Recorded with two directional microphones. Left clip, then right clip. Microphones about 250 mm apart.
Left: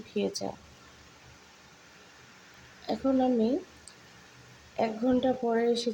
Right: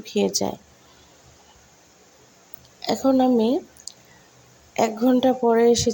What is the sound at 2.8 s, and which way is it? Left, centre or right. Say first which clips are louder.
Speech: right 8 dB; right.